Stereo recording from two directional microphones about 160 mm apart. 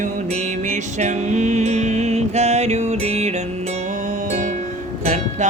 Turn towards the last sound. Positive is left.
turn(degrees=-45)  # may be behind; listen again after turning